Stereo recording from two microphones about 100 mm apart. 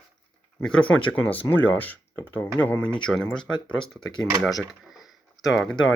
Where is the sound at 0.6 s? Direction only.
10° left (ahead or behind).